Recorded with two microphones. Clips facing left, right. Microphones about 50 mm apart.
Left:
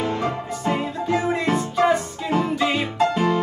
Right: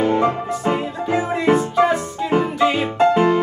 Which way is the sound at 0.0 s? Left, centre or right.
Right.